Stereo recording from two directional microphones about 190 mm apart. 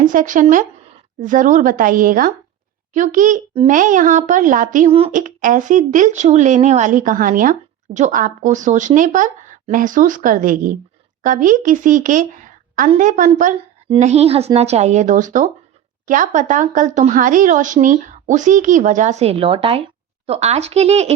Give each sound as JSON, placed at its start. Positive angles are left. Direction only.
{"t": 0.0, "sound": "speech", "side_deg": -45}
{"t": 4.9, "sound": "a woman's voice", "side_deg": -30}
{"t": 5.1, "sound": "a woman's voice", "side_deg": -45}